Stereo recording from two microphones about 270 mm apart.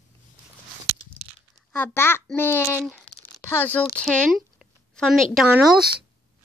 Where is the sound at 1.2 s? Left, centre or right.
Right.